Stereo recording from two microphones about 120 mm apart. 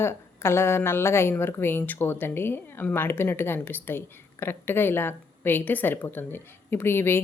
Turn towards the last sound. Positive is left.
turn(degrees=20)  # may be behind; listen again after turning